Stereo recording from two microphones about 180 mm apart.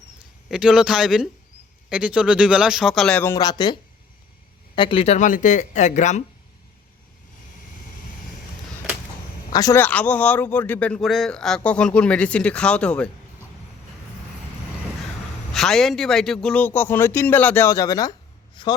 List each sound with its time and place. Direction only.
0.4 s speech: 5° right (ahead or behind)
3.3 s speech: 25° left (ahead or behind); by 6.2 s 40° left (ahead or behind)
9.5 s speech: 20° left (ahead or behind)
9.8 s speech: 10° left (ahead or behind)
15.5 s speech: centre (ahead or behind); by 18.1 s 20° left (ahead or behind)